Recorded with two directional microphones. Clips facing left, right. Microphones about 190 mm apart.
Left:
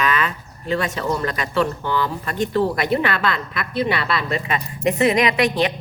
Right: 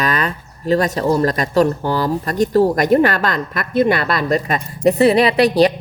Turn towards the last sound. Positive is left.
turn(degrees=-35)  # may be behind; listen again after turning